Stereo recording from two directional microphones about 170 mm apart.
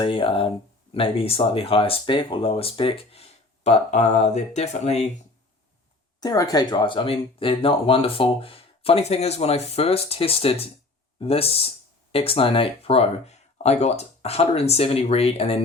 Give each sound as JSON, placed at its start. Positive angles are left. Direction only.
{"t": 0.0, "sound": "speech", "side_deg": 30}
{"t": 6.1, "sound": "speech", "side_deg": 20}